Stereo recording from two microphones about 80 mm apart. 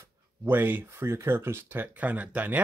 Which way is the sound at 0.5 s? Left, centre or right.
Right.